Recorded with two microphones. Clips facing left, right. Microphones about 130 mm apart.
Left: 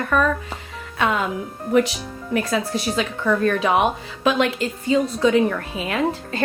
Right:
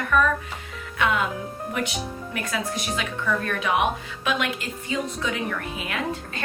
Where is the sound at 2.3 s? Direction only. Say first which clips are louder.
Left 8 dB; 30° left (ahead or behind).